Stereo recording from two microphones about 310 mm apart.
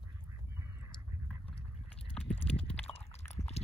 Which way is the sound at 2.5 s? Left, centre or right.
Centre.